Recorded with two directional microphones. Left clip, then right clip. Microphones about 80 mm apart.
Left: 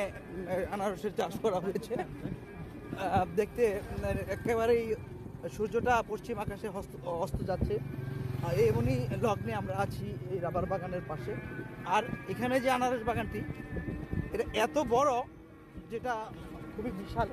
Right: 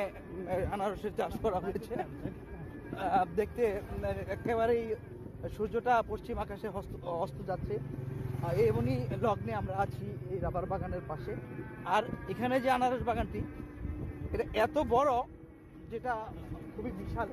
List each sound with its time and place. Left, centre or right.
0.5 s speech: right
1.1 s speech: centre
3.0 s speech: centre
5.6 s speech: right
7.4 s speech: centre
8.4 s speech: right
8.9 s speech: right
10.7 s speech: right
11.8 s speech: right
15.9 s speech: centre